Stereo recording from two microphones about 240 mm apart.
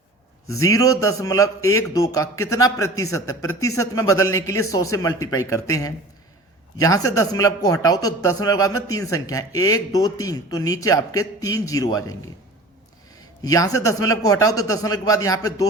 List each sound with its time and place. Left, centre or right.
0.4 s a man's voice: centre
13.4 s a man's voice: centre